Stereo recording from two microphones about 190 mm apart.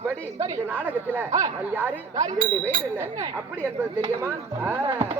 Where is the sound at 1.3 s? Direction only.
20° right (ahead or behind).